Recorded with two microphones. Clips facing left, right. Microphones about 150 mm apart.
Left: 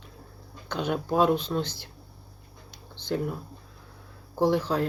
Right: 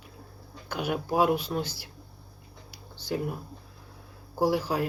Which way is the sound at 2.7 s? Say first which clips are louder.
Left 2 dB; 10° right (ahead or behind).